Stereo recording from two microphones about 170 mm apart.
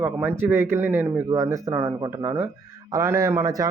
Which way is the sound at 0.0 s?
10° right (ahead or behind).